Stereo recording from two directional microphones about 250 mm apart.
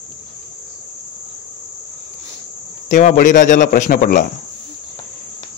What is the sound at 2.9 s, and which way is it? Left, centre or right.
A man's voice, left.